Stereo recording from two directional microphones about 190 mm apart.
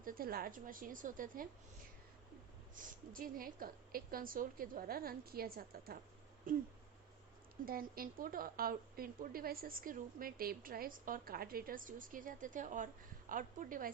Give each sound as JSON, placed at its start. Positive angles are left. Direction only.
{"t": 0.0, "sound": "a woman's voice", "side_deg": -50}
{"t": 2.7, "sound": "a woman's voice", "side_deg": -50}